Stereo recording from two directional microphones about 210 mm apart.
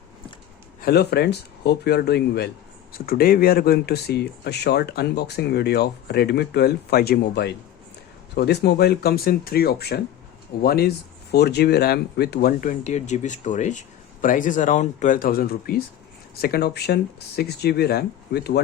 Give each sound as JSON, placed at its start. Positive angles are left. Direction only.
{"t": 0.8, "sound": "speech", "side_deg": 50}